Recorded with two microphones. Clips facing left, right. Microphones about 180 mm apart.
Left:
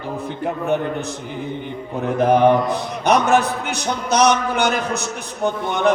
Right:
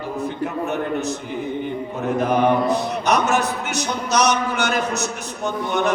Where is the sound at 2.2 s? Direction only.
55° left (ahead or behind).